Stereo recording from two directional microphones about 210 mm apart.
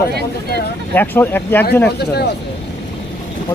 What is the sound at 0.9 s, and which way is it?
Speech, 10° left (ahead or behind).